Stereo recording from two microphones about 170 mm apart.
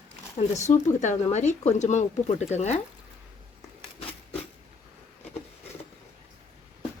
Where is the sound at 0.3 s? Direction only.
40° left (ahead or behind).